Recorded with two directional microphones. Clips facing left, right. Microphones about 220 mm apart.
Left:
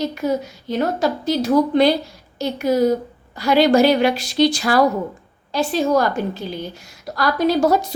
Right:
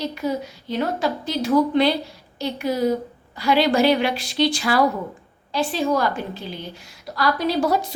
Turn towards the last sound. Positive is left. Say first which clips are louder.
# left 4 dB
turn(degrees=45)  # may be behind; listen again after turning